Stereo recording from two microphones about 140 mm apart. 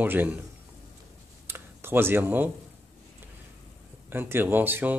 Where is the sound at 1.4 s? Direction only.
15° right (ahead or behind).